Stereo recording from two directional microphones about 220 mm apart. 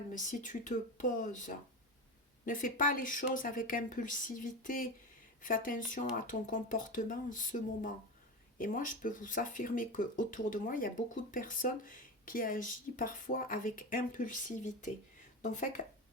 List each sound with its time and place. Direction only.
0.1 s speech: 35° left (ahead or behind)